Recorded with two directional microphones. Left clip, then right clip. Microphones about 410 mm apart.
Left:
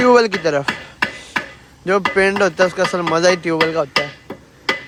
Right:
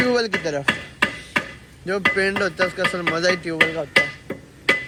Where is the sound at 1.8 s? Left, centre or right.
Centre.